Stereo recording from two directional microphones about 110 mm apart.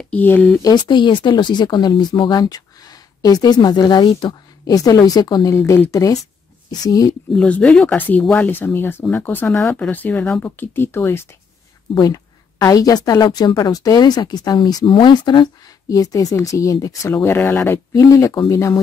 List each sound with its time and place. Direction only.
0.1 s speech: 15° left (ahead or behind)
0.6 s speech: 40° left (ahead or behind)
5.5 s speech: 25° left (ahead or behind)
7.3 s speech: 10° left (ahead or behind)
11.9 s speech: 35° left (ahead or behind)
15.9 s speech: 30° left (ahead or behind)
17.9 s speech: 30° left (ahead or behind)